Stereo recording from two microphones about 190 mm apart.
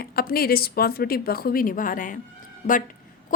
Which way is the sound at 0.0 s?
55° left (ahead or behind).